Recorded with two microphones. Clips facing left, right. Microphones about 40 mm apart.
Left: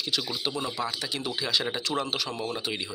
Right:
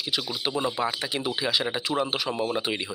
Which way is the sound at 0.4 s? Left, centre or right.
Centre.